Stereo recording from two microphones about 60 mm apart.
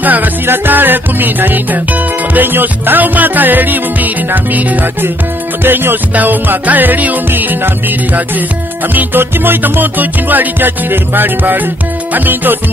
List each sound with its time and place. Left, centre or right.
0.0 s music: right